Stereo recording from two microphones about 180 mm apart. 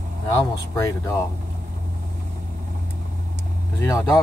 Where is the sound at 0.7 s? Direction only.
15° left (ahead or behind).